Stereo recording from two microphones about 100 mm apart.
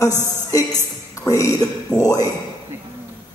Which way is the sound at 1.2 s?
35° left (ahead or behind).